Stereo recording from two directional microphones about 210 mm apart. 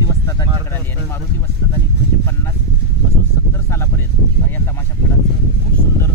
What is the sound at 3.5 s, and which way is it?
Speech, 10° left (ahead or behind).